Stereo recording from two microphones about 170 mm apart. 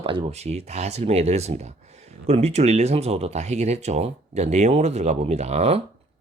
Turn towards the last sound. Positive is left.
turn(degrees=-40)  # may be behind; listen again after turning